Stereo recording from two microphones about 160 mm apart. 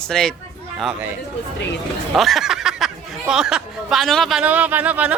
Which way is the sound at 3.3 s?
5° right (ahead or behind).